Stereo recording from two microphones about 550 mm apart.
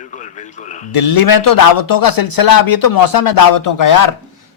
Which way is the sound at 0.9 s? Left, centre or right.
Left.